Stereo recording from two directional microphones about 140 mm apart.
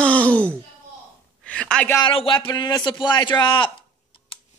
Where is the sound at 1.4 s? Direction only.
10° left (ahead or behind).